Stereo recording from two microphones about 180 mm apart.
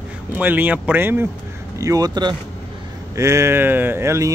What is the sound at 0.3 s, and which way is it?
Speech, 10° right (ahead or behind).